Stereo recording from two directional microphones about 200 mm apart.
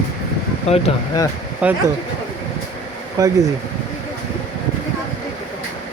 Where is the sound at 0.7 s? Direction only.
30° left (ahead or behind).